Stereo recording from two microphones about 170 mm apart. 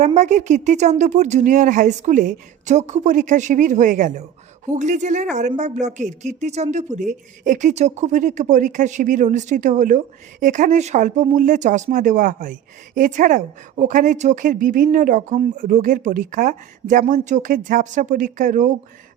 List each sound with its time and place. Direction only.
0.0 s a woman's voice: 45° right (ahead or behind)